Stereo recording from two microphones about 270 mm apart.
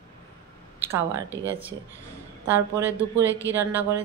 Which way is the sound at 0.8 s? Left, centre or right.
Centre.